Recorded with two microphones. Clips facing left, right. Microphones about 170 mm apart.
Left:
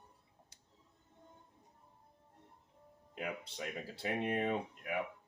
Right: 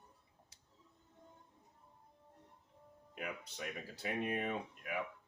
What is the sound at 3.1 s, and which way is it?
Speech, 30° left (ahead or behind).